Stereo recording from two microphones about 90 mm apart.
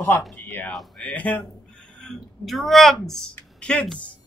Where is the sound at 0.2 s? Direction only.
Centre (ahead or behind).